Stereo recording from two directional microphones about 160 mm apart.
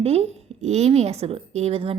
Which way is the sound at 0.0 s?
40° right (ahead or behind).